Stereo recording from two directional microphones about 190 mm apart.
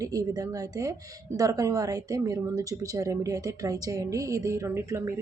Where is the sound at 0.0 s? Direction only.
20° right (ahead or behind).